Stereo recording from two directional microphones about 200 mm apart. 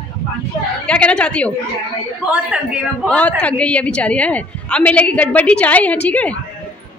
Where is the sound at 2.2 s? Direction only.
5° right (ahead or behind).